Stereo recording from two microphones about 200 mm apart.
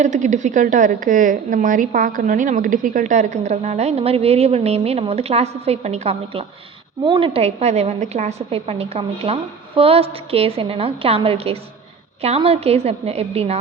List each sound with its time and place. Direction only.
0.0 s a woman's voice: 35° right (ahead or behind)